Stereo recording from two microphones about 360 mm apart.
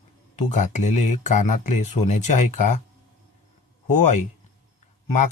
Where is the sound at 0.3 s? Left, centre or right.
Centre.